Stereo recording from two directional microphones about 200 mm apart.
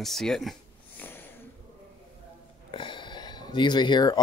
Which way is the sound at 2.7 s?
25° left (ahead or behind).